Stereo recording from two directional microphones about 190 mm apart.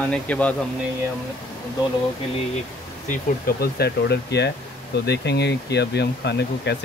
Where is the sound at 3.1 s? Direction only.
55° left (ahead or behind).